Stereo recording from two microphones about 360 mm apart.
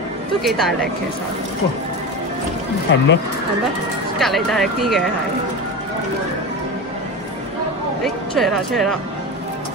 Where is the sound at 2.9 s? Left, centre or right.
Left.